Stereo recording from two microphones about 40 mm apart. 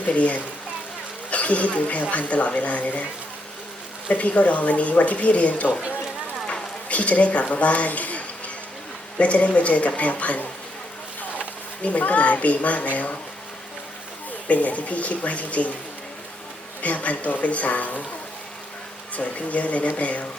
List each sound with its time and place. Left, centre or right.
0.0 s a woman's voice: left
4.1 s a woman's voice: left
6.5 s a sound: left
7.5 s a woman's voice: left
14.4 s a woman's voice: left
16.8 s a woman's voice: left
19.1 s a woman's voice: left